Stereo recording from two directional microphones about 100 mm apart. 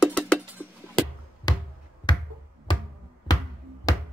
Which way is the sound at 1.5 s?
40° left (ahead or behind).